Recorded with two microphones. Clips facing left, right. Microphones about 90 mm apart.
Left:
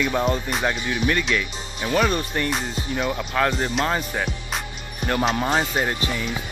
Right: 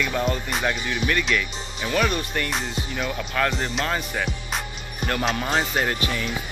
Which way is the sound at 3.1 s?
20° left (ahead or behind).